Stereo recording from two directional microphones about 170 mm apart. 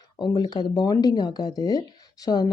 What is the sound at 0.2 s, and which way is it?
A woman's voice, 25° left (ahead or behind).